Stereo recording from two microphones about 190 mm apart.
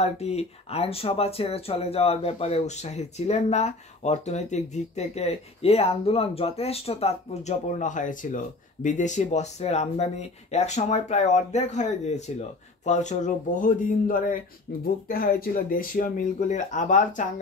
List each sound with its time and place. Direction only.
0.0 s speech: 35° left (ahead or behind)